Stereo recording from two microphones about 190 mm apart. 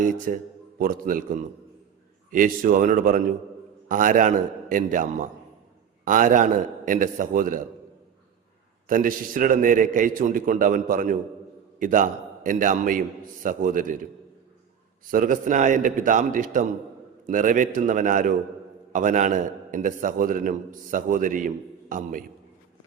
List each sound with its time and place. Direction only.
0.0 s a man's voice: 45° right (ahead or behind)
8.9 s a man's voice: 45° right (ahead or behind)
15.0 s a man's voice: 45° right (ahead or behind)